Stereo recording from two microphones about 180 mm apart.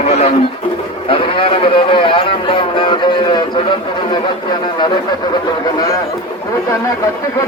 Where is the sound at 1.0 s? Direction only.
30° left (ahead or behind).